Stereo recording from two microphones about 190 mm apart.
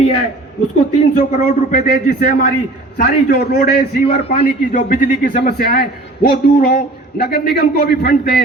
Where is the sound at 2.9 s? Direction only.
50° left (ahead or behind).